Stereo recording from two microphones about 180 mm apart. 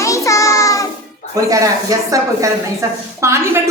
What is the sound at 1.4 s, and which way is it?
Speech, 20° right (ahead or behind).